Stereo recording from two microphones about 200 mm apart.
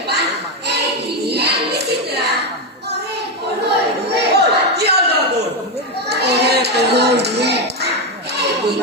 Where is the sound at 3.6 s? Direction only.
55° right (ahead or behind).